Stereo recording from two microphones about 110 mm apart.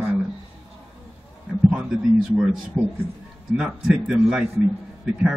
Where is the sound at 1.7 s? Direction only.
5° right (ahead or behind).